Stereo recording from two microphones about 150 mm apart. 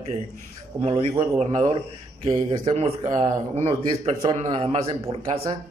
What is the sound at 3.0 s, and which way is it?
Speech, 25° right (ahead or behind).